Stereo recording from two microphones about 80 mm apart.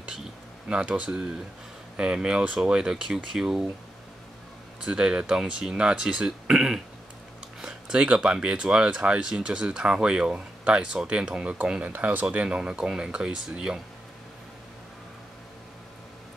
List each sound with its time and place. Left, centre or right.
0.7 s speech: centre
4.8 s speech: centre